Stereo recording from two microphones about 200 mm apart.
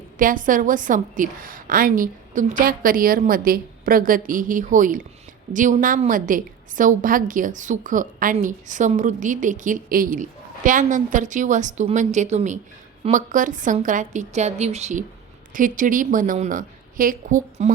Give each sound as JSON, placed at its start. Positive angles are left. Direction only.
{"t": 0.2, "sound": "a woman's voice", "side_deg": -40}